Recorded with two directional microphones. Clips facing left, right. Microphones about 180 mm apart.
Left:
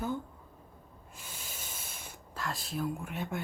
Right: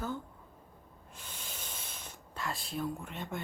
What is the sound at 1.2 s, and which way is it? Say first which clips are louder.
Speech: even; 5° left (ahead or behind).